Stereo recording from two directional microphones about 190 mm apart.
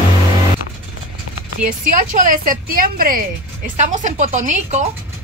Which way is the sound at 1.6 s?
45° right (ahead or behind).